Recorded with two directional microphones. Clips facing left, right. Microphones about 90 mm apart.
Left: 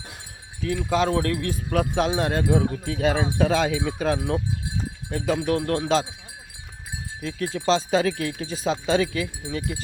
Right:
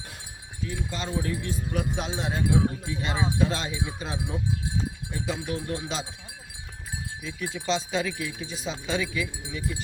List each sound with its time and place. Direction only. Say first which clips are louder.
0.6 s speech: left 11 dB; 90° left; by 4.4 s 60° left (ahead or behind)
5.1 s speech: left 9 dB; 75° left (ahead or behind)
7.2 s speech: left 7 dB; 65° left (ahead or behind)
7.5 s speech: left 7 dB; 40° left (ahead or behind)
8.1 s speech: left 5 dB; 65° left (ahead or behind)
8.4 s speech: left 11 dB; 45° left (ahead or behind)